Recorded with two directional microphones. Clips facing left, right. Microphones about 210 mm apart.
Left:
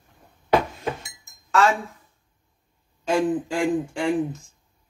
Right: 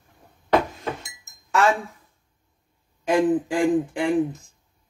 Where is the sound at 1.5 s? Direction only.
15° right (ahead or behind).